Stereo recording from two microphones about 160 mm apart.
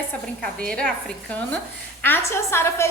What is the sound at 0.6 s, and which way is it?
Speech, 5° left (ahead or behind).